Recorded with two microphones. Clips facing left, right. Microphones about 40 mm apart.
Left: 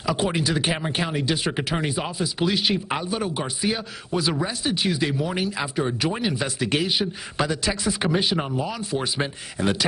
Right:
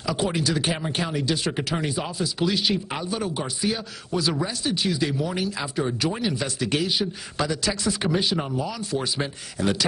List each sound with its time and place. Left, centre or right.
0.0 s speech: left
8.1 s speech: left